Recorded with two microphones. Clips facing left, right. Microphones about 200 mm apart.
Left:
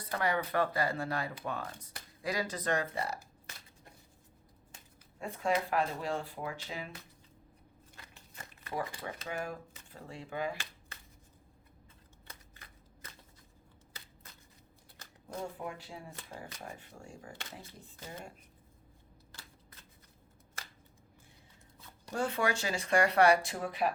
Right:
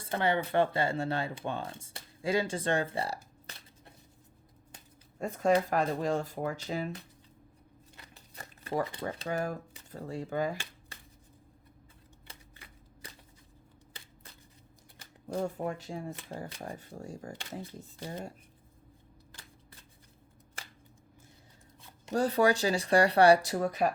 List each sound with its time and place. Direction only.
0.0 s speech: 25° right (ahead or behind)
5.2 s speech: 40° right (ahead or behind)
8.1 s crumpling: 35° right (ahead or behind)
9.2 s speech: 40° right (ahead or behind)
15.3 s speech: 40° right (ahead or behind)
22.1 s speech: 35° right (ahead or behind)